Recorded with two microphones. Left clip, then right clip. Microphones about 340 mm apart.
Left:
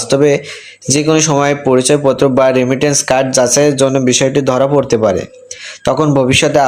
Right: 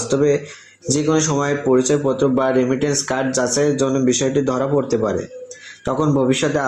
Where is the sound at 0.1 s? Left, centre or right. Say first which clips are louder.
Left 7 dB; left.